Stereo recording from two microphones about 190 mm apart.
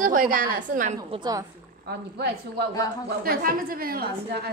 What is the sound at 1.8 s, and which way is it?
A woman's voice, 60° right (ahead or behind).